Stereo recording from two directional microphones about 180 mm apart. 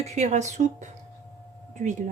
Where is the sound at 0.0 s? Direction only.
40° right (ahead or behind).